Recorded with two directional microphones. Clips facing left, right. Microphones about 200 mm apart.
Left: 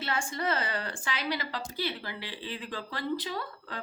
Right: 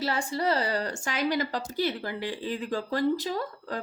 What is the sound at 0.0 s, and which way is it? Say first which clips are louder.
A woman's voice: right 4 dB; 35° right (ahead or behind).